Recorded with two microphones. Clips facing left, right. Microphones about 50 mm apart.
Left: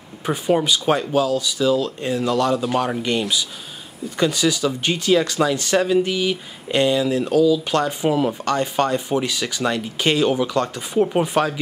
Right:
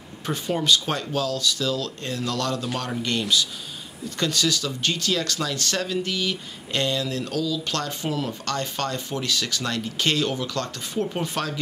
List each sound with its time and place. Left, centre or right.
0.2 s speech: centre